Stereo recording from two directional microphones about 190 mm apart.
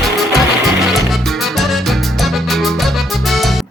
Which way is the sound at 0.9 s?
Centre (ahead or behind).